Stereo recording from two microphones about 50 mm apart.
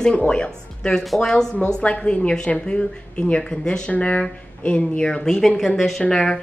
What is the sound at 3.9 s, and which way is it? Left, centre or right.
A woman's voice, left.